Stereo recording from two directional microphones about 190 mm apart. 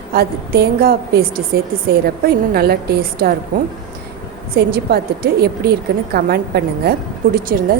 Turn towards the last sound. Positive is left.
turn(degrees=-50)  # may be behind; listen again after turning